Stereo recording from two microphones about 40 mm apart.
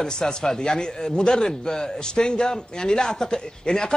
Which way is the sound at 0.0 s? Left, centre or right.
Centre.